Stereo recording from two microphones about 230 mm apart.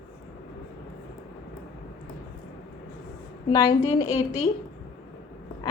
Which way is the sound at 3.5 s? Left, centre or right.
Centre.